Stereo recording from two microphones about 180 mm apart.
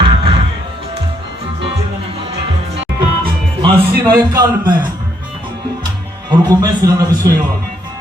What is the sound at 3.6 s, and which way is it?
Music, 25° right (ahead or behind).